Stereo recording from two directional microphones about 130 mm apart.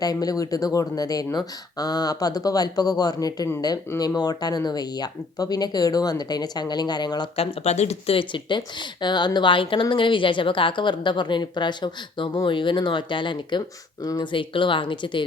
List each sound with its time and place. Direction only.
0.0 s speech: 30° left (ahead or behind)
7.3 s a woman's voice: 55° left (ahead or behind); by 15.2 s 40° left (ahead or behind)